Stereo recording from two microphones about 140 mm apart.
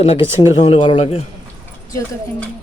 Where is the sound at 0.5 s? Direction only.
45° left (ahead or behind).